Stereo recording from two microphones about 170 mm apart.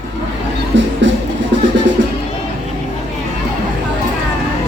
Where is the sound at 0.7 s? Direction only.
90° right.